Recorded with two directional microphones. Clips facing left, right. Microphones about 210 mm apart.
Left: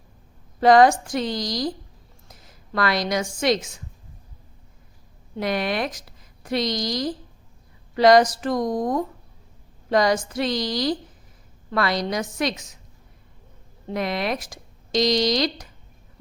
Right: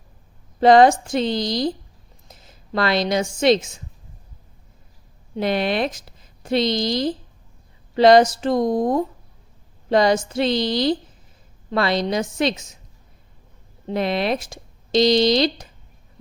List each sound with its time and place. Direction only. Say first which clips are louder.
0.6 s a woman's voice: right 2 dB; 25° right (ahead or behind)
5.4 s a woman's voice: right 3 dB; 25° right (ahead or behind)
13.8 s speech: right 4 dB; 30° right (ahead or behind)